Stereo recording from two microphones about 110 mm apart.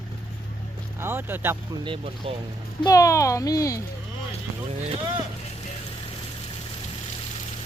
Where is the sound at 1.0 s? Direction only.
20° right (ahead or behind).